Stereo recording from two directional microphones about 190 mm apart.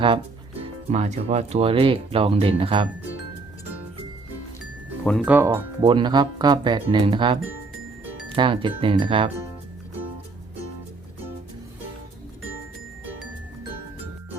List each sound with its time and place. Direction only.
0.6 s speech: 35° right (ahead or behind)
5.0 s speech: centre (ahead or behind)
5.3 s speech: 10° right (ahead or behind)
5.8 s speech: 25° right (ahead or behind)